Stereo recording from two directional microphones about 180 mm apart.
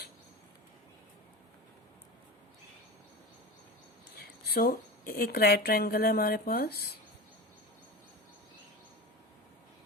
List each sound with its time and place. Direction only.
4.2 s a woman's voice: 60° left (ahead or behind)